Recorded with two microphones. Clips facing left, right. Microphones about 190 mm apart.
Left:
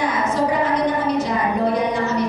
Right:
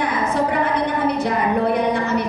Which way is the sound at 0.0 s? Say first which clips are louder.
Even; 60° right (ahead or behind).